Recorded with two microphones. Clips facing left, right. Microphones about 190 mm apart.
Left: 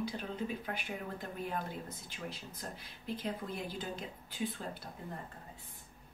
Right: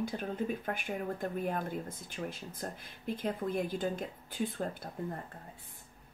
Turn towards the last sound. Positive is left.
turn(degrees=-50)  # may be behind; listen again after turning